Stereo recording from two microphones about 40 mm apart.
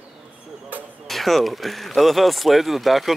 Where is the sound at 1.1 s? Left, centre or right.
Centre.